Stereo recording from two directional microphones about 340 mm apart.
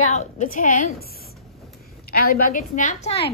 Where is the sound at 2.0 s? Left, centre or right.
Left.